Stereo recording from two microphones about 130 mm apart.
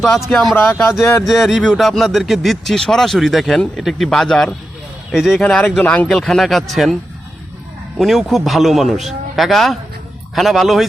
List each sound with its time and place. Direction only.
0.3 s speech: centre (ahead or behind)
0.5 s speech: 15° left (ahead or behind)
1.2 s speech: centre (ahead or behind)
7.9 s speech: centre (ahead or behind)